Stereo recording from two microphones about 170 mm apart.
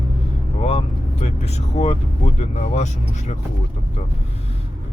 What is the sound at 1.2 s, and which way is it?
Vehicle, 40° left (ahead or behind).